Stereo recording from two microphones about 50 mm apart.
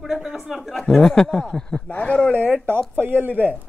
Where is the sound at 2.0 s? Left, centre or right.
Left.